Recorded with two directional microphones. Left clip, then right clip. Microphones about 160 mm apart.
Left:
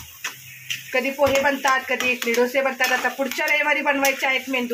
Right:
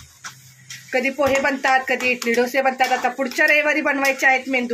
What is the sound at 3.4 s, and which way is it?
Speech, 90° right.